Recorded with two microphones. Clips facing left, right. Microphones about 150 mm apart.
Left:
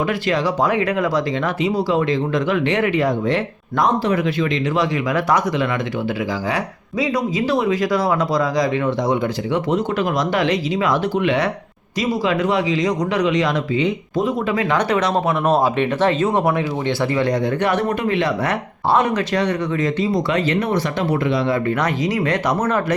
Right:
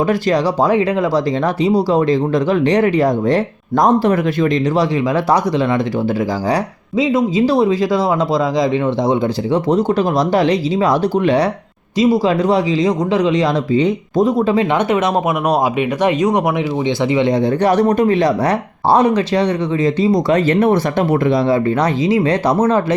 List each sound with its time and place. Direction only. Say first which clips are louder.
0.1 s speech: right 5 dB; 35° right (ahead or behind)
4.8 s speech: right 4 dB; 30° right (ahead or behind)
7.0 s speech: right 6 dB; 25° right (ahead or behind)
17.2 s speech: right 4 dB; 25° right (ahead or behind); by 21.4 s 50° right (ahead or behind)
21.5 s speech: right 5 dB; 30° right (ahead or behind)